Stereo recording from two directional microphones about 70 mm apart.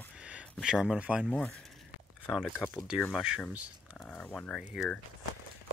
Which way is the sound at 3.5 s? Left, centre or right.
Centre.